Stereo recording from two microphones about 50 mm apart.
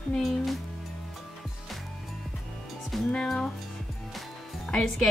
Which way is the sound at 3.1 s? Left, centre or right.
Centre.